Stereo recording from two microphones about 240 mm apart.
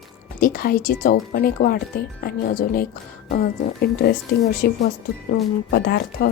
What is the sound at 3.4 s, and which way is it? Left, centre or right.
A woman's voice, left.